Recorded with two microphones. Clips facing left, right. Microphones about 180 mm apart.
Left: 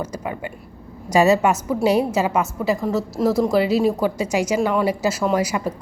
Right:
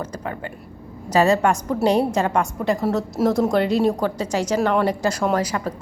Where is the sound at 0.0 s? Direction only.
10° left (ahead or behind).